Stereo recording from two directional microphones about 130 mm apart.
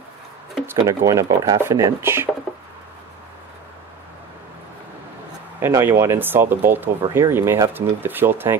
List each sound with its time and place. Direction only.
0.7 s speech: 25° right (ahead or behind)
5.6 s speech: 20° right (ahead or behind)